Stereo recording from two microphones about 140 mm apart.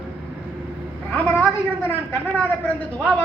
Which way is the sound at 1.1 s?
15° left (ahead or behind).